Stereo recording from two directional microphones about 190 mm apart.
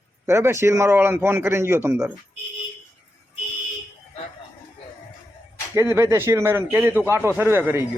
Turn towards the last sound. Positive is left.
turn(degrees=-10)  # may be behind; listen again after turning